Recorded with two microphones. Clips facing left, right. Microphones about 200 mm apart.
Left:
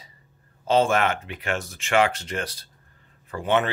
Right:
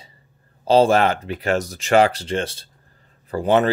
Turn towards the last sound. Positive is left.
turn(degrees=-40)  # may be behind; listen again after turning